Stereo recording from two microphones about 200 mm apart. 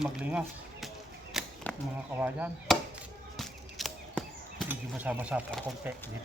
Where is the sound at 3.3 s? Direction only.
Centre (ahead or behind).